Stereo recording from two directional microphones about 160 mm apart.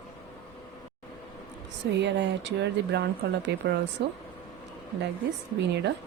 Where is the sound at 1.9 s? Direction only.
90° right.